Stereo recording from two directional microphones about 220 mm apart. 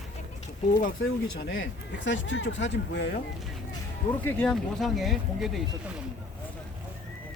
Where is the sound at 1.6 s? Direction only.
60° left (ahead or behind).